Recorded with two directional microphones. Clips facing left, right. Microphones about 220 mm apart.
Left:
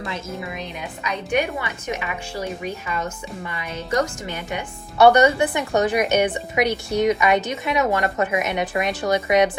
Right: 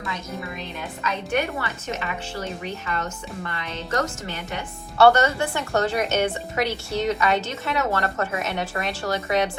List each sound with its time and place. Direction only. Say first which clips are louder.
0.5 s a woman's voice: left 2 dB; 15° left (ahead or behind)